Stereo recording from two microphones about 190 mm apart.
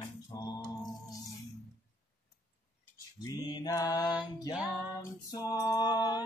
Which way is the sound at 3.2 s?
20° left (ahead or behind).